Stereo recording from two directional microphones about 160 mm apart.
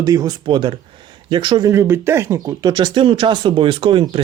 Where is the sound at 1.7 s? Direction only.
15° right (ahead or behind); by 4.1 s 30° right (ahead or behind).